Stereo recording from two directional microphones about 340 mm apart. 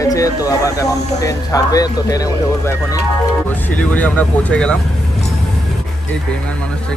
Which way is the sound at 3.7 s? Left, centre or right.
Centre.